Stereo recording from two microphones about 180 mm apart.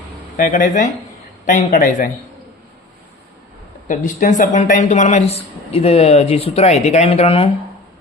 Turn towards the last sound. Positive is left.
turn(degrees=35)  # may be behind; listen again after turning